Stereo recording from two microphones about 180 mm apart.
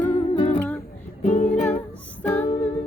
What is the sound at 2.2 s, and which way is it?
Music, 10° left (ahead or behind).